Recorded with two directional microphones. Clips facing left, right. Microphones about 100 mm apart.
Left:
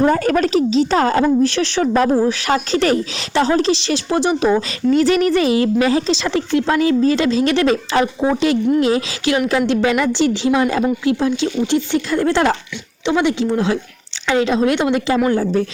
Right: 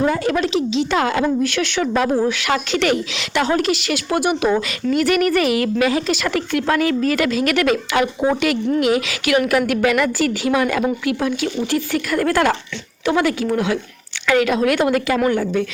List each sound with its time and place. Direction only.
0.0 s speech: 45° left (ahead or behind)